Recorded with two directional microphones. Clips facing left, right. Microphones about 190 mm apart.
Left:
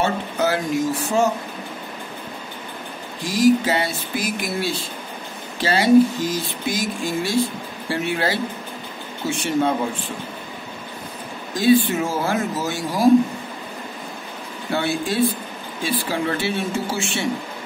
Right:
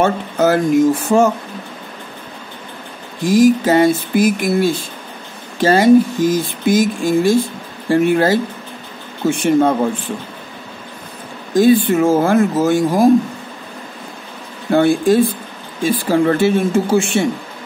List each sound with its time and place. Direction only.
0.0 s speech: 50° right (ahead or behind)
3.3 s speech: 50° right (ahead or behind)
11.5 s speech: 50° right (ahead or behind)
14.7 s speech: 50° right (ahead or behind)